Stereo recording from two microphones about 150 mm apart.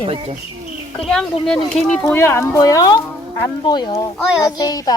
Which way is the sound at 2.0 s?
15° left (ahead or behind).